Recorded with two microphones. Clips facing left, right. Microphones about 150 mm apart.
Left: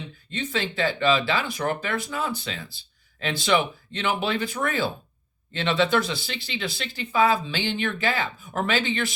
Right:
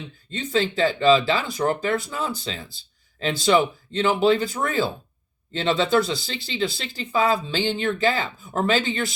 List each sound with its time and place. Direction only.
0.3 s speech: 35° right (ahead or behind)